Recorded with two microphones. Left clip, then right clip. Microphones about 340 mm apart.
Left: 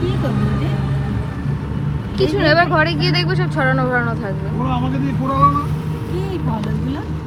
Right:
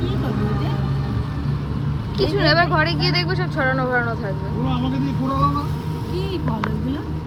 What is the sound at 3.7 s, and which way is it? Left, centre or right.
Speech, left.